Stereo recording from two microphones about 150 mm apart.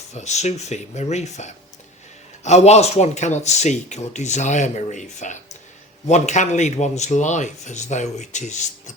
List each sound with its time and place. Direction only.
0.1 s speech: 50° left (ahead or behind)